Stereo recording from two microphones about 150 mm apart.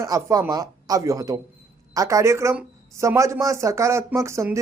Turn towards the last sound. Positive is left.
turn(degrees=-20)  # may be behind; listen again after turning